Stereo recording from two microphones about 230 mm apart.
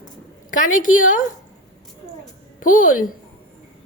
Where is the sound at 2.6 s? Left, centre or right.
Left.